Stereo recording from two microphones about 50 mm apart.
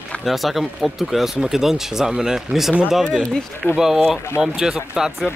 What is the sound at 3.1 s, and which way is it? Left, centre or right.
Speech, centre.